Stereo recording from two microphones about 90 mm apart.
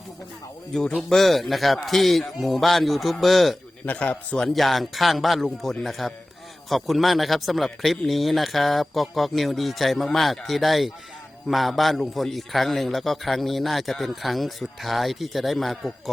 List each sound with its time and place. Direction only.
0.7 s a man's voice: 5° left (ahead or behind)
3.8 s speech: 15° left (ahead or behind)
4.4 s a man's voice: centre (ahead or behind)